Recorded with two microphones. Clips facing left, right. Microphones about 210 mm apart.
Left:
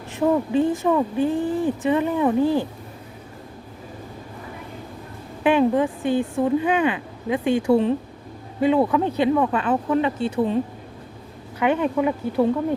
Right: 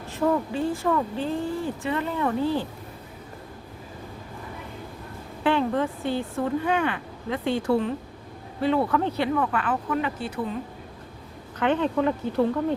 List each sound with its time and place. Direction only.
0.1 s speech: 15° left (ahead or behind)
5.4 s speech: 15° left (ahead or behind)
11.6 s speech: 10° left (ahead or behind)